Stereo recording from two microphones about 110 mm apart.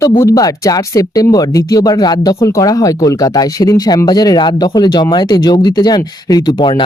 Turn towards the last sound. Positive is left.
turn(degrees=45)  # may be behind; listen again after turning